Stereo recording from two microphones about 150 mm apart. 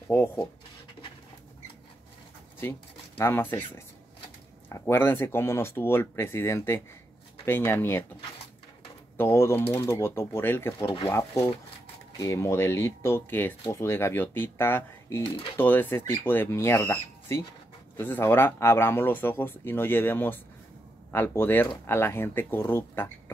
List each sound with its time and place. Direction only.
0.1 s speech: 20° left (ahead or behind)
3.2 s speech: 15° left (ahead or behind)
9.1 s speech: 15° left (ahead or behind)